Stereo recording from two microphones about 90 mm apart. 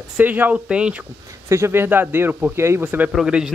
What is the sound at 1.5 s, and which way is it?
Speech, 30° right (ahead or behind).